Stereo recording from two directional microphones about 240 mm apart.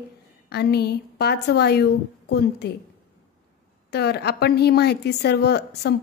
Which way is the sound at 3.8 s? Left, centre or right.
Left.